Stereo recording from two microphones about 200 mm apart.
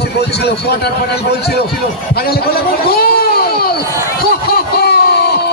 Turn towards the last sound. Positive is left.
turn(degrees=55)  # may be behind; listen again after turning